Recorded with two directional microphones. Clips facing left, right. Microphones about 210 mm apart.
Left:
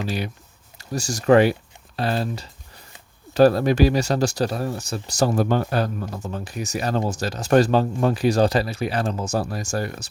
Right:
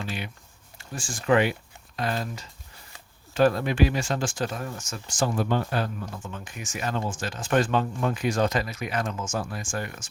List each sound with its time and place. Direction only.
0.8 s speech: 40° left (ahead or behind)